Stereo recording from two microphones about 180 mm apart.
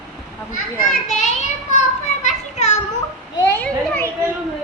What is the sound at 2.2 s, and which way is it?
Children playing, 40° left (ahead or behind).